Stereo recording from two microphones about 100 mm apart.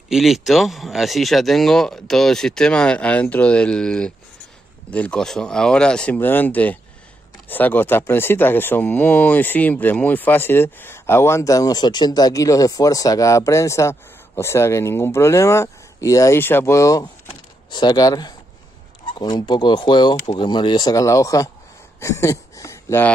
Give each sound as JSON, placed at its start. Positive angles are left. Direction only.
{"t": 0.1, "sound": "speech", "side_deg": -5}
{"t": 6.1, "sound": "speech", "side_deg": 20}
{"t": 17.6, "sound": "speech", "side_deg": 45}
{"t": 21.0, "sound": "speech", "side_deg": 30}